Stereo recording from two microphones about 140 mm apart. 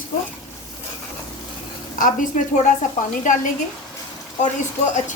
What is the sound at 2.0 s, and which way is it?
Speech, 70° left (ahead or behind).